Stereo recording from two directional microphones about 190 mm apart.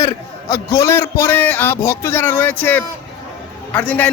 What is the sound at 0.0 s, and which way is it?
A man's voice, 15° left (ahead or behind).